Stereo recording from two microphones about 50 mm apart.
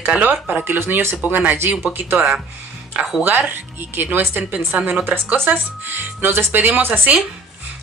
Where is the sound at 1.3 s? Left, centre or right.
Right.